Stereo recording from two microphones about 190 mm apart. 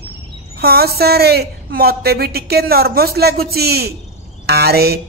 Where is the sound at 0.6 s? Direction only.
55° right (ahead or behind).